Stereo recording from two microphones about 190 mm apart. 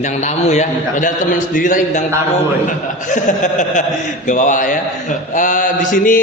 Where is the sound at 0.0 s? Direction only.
35° left (ahead or behind).